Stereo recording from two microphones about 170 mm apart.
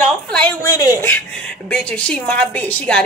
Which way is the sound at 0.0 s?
5° left (ahead or behind).